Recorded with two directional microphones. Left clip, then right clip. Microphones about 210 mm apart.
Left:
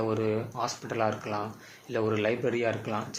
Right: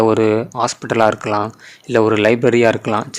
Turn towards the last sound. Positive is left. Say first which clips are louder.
# right 16 dB
turn(degrees=-60)  # may be behind; listen again after turning